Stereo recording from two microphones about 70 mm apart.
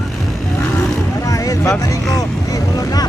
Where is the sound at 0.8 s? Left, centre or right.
Left.